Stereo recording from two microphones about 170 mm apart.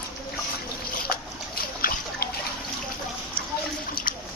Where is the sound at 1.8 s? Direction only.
65° left (ahead or behind).